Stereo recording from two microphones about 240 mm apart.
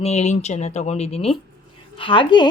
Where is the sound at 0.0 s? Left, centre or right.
Left.